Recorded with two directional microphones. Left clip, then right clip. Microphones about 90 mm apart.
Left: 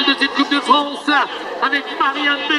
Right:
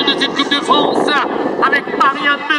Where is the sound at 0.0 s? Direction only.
25° right (ahead or behind).